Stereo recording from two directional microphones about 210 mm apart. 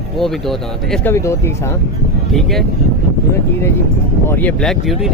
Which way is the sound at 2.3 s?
Centre (ahead or behind).